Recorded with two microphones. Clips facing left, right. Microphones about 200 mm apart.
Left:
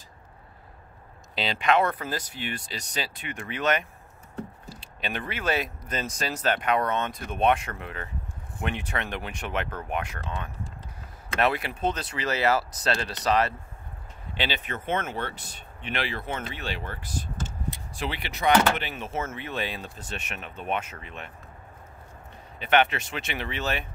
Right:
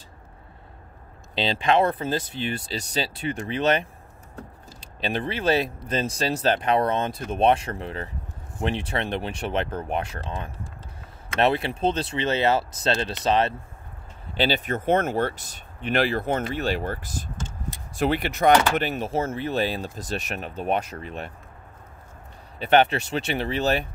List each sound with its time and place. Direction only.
1.3 s speech: 30° right (ahead or behind)
14.3 s speech: 40° right (ahead or behind)
22.6 s speech: 35° right (ahead or behind)